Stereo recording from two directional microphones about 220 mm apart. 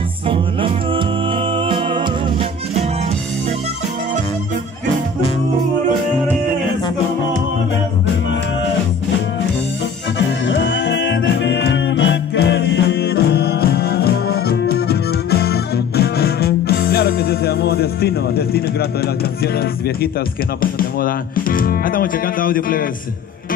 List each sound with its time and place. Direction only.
0.3 s music: 25° right (ahead or behind)
10.1 s music: 55° left (ahead or behind)
20.6 s music: 40° left (ahead or behind)